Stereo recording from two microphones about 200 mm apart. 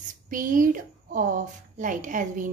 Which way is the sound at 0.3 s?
40° right (ahead or behind).